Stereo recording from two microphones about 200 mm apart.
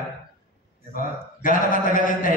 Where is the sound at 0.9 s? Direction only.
40° left (ahead or behind).